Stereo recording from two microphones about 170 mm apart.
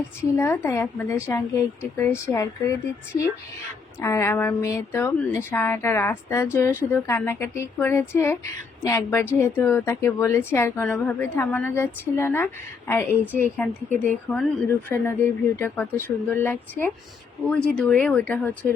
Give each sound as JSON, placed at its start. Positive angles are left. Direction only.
{"t": 0.2, "sound": "a woman's voice", "side_deg": 15}
{"t": 4.0, "sound": "a woman's voice", "side_deg": 15}